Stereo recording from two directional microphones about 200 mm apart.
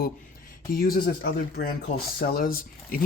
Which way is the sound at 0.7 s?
45° left (ahead or behind).